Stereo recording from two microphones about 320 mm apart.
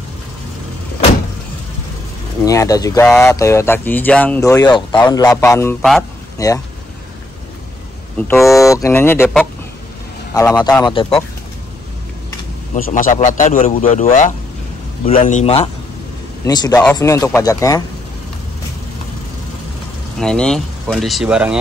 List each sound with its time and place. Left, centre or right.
2.4 s speech: centre
8.2 s speech: centre
12.7 s a man's voice: left
20.2 s speech: centre